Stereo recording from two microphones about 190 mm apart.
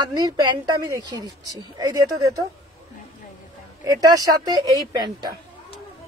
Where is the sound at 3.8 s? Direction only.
20° right (ahead or behind).